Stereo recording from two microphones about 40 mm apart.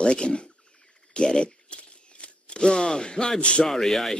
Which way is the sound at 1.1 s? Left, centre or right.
Left.